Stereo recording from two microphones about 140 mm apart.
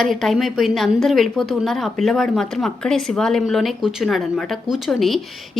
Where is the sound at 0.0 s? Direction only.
Centre (ahead or behind).